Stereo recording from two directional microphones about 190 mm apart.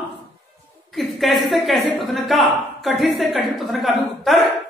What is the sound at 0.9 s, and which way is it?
A woman's voice, centre (ahead or behind).